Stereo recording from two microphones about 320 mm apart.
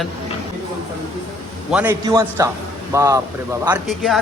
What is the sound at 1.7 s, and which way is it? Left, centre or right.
A woman's voice, centre.